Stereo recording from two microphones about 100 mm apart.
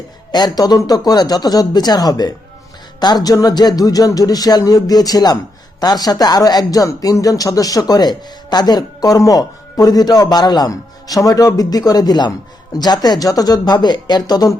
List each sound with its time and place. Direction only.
0.3 s speech: 45° left (ahead or behind)